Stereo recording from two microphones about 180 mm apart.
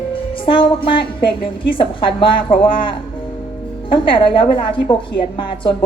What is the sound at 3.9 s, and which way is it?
A woman's voice, 30° left (ahead or behind).